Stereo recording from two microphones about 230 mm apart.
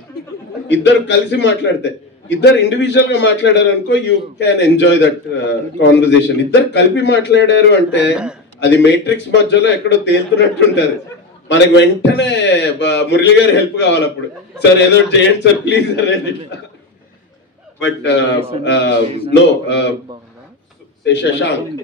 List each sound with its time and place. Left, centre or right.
0.7 s a man's voice: left
17.7 s a man's voice: left
21.0 s a man's voice: left